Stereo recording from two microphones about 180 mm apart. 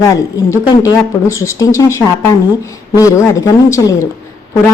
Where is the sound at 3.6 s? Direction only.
15° left (ahead or behind).